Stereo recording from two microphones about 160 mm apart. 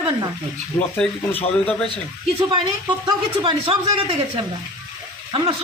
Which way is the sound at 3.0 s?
35° right (ahead or behind).